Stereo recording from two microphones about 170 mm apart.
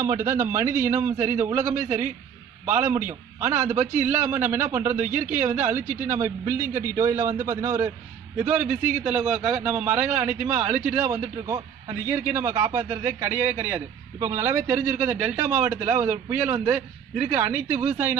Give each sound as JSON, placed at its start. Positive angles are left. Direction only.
{"t": 0.0, "sound": "a man's voice", "side_deg": -20}